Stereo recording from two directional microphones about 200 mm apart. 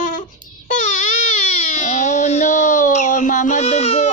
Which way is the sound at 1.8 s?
35° left (ahead or behind).